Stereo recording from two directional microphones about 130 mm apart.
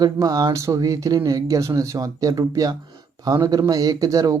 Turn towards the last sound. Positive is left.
turn(degrees=-25)  # may be behind; listen again after turning